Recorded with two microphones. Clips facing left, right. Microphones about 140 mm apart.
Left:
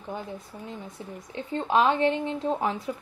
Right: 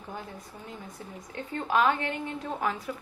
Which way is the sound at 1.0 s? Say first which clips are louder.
Left 2 dB; 20° left (ahead or behind).